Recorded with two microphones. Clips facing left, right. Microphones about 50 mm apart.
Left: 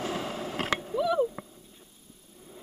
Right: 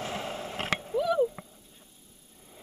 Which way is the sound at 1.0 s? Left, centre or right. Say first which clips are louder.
Even; centre.